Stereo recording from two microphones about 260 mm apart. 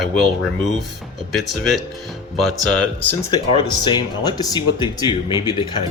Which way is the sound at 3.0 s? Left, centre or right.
Centre.